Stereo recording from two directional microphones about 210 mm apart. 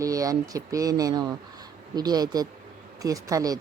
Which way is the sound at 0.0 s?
15° right (ahead or behind).